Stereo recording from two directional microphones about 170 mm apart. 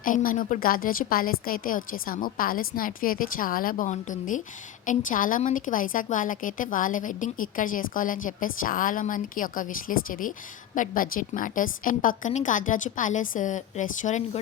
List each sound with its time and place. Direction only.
0.0 s a woman's voice: 55° left (ahead or behind)